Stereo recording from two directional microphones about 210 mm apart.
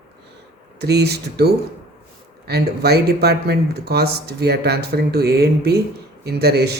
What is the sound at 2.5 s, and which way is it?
Speech, 50° right (ahead or behind).